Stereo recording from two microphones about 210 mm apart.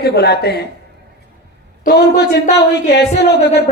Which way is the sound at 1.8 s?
50° left (ahead or behind).